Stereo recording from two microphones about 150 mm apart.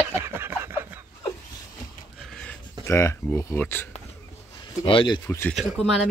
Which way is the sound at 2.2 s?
5° left (ahead or behind).